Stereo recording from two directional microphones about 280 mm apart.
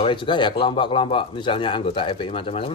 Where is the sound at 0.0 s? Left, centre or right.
Centre.